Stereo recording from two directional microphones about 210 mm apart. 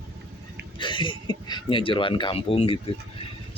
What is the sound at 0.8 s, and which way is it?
Speech, 25° left (ahead or behind).